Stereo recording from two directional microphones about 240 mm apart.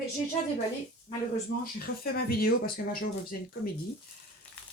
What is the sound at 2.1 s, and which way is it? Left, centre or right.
Speech, left.